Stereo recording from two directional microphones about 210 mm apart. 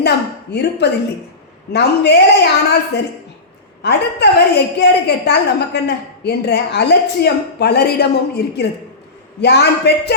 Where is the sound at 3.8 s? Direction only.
55° left (ahead or behind).